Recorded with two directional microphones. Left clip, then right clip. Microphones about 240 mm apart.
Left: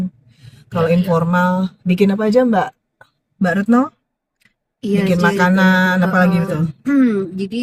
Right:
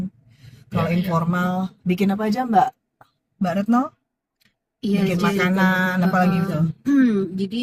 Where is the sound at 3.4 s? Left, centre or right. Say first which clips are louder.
Left 5 dB; centre.